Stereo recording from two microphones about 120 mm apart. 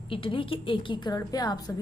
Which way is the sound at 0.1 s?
45° left (ahead or behind).